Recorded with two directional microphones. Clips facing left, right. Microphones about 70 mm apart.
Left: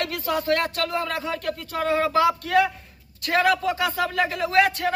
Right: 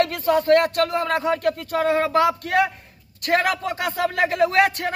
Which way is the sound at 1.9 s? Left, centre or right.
Right.